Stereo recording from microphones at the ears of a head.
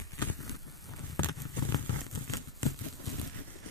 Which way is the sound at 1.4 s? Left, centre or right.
Left.